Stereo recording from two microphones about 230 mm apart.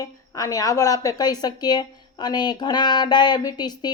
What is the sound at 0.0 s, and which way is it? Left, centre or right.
A woman's voice, centre.